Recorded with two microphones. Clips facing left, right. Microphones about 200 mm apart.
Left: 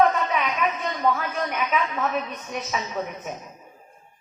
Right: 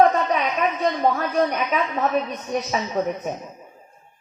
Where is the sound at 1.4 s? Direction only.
35° right (ahead or behind).